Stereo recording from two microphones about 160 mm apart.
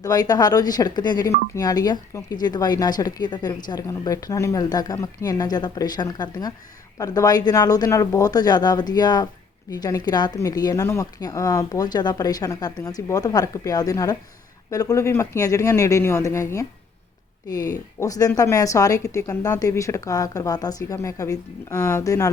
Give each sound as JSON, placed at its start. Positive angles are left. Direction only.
{"t": 0.0, "sound": "speech", "side_deg": 25}